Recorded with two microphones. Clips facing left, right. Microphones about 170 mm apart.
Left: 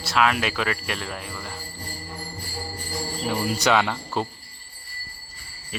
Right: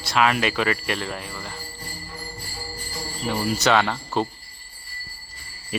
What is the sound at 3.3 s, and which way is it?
Speech, 5° left (ahead or behind).